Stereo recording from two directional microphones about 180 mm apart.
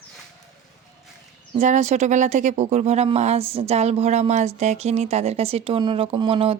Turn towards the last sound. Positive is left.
turn(degrees=-30)  # may be behind; listen again after turning